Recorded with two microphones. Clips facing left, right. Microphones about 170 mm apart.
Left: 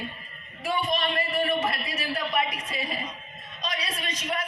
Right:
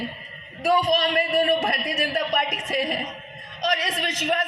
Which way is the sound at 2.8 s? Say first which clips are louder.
Right 6 dB; 75° right (ahead or behind).